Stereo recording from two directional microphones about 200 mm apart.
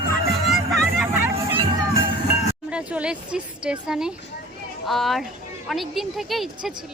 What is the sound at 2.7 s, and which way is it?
A woman's voice, 5° right (ahead or behind).